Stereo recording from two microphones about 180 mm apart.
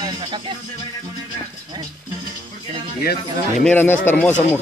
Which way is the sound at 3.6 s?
10° left (ahead or behind).